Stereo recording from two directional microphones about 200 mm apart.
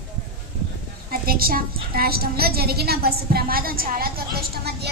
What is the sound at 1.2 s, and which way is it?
A woman's voice, 45° right (ahead or behind).